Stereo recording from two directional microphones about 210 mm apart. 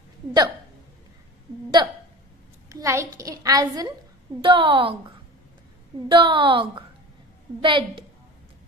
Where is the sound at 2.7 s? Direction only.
15° right (ahead or behind).